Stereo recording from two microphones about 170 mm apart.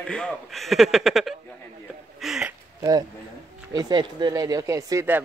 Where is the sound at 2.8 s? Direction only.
20° right (ahead or behind).